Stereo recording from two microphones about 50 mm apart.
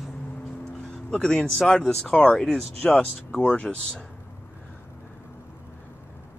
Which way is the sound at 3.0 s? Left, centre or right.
Left.